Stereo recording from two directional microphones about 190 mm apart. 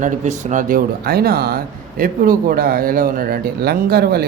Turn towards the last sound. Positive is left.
turn(degrees=-55)  # may be behind; listen again after turning